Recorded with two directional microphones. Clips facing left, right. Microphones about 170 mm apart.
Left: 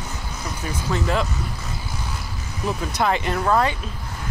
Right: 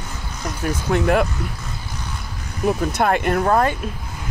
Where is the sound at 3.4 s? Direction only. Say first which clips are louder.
Right 1 dB; 40° right (ahead or behind).